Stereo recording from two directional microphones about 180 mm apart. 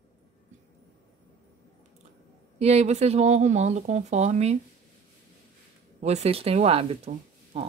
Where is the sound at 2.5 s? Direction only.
35° right (ahead or behind).